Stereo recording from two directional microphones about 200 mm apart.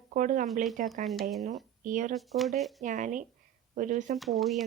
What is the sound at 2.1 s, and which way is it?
Speech, centre (ahead or behind).